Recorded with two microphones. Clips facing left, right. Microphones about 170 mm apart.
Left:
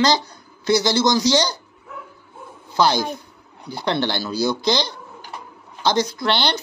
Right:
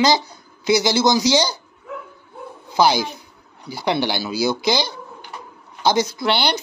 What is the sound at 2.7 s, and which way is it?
Speech, 10° right (ahead or behind).